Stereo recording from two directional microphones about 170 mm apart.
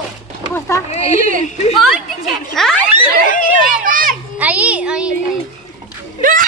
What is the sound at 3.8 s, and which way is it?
Children playing, 55° right (ahead or behind).